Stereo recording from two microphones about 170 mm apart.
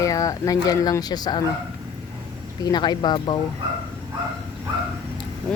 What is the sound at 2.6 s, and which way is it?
Speech, 25° left (ahead or behind).